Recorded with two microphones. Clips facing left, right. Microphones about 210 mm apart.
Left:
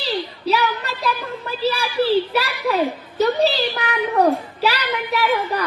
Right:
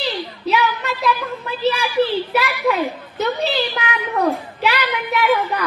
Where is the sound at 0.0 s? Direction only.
35° left (ahead or behind).